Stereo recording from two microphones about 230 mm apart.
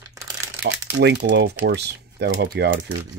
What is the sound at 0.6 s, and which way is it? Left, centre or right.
Speech, right.